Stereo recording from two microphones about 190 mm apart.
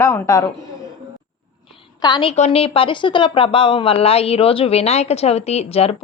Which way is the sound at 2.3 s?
35° left (ahead or behind).